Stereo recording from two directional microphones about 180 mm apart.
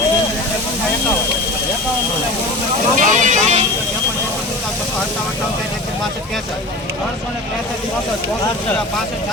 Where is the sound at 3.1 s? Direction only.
45° right (ahead or behind).